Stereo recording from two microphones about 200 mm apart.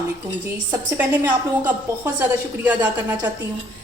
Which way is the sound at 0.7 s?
10° right (ahead or behind).